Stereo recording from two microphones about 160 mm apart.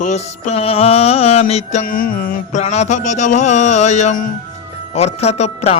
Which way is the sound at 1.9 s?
65° left (ahead or behind).